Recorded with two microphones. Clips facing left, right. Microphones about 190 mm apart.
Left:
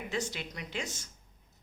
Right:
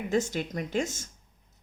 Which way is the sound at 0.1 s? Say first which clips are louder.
Right 10 dB; 45° right (ahead or behind).